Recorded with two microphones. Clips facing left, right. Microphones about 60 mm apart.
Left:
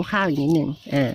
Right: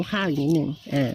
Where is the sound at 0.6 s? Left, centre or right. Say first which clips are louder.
Left 2 dB; left.